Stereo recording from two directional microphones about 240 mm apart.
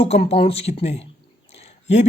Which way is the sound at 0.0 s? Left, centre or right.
Left.